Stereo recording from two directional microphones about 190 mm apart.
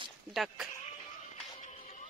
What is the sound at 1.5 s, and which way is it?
Music, 35° left (ahead or behind).